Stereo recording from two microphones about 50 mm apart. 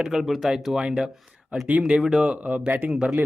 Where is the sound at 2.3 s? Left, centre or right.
Right.